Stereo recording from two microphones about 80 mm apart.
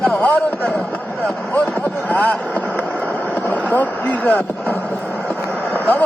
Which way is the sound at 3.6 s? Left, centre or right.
Centre.